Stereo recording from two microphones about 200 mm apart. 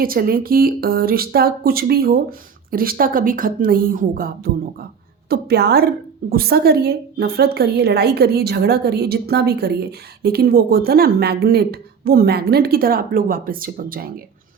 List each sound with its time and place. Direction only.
0.0 s speech: 45° right (ahead or behind)